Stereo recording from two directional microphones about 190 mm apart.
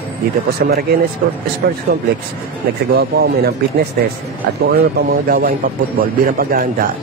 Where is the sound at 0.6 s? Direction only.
55° right (ahead or behind).